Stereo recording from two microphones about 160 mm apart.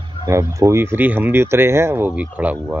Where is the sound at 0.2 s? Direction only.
20° right (ahead or behind).